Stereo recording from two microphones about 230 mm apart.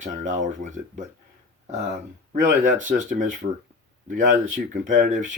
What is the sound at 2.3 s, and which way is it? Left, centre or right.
Speech, right.